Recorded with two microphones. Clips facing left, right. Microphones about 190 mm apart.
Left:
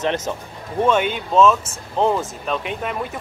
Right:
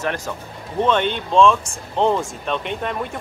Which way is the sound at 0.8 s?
5° left (ahead or behind).